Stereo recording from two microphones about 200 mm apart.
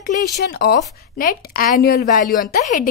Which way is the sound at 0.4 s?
50° left (ahead or behind).